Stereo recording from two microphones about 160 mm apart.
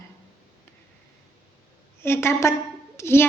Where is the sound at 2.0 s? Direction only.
15° left (ahead or behind).